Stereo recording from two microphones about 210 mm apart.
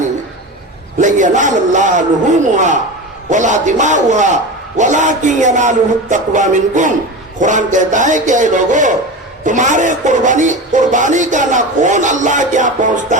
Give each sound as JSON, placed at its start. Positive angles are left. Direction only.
{"t": 0.9, "sound": "speech", "side_deg": -35}